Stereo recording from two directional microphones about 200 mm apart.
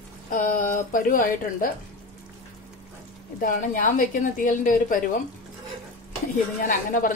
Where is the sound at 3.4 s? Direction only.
40° left (ahead or behind).